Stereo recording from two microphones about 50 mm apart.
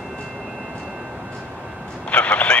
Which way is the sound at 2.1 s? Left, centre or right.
Left.